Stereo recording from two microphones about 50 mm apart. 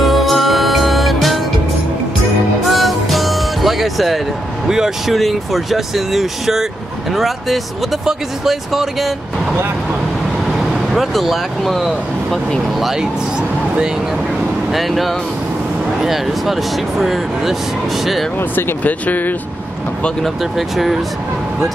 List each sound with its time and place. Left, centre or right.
0.0 s music: centre
2.6 s music: centre
4.6 s speech: centre
10.6 s speech: centre
14.7 s speech: centre
18.9 s speech: left
20.5 s speech: centre